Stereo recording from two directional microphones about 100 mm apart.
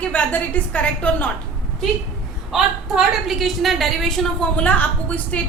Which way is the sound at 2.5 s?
Centre (ahead or behind).